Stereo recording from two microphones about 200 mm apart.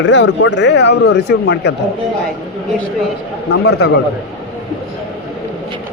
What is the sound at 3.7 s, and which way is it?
Speech, 55° left (ahead or behind).